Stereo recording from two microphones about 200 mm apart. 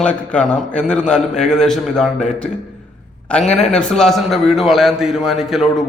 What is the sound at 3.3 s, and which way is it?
A man's voice, 5° left (ahead or behind).